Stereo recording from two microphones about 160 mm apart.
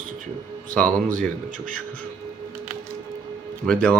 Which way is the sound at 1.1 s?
55° right (ahead or behind).